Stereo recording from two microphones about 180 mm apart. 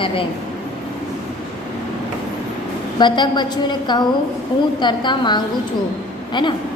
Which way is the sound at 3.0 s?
25° left (ahead or behind).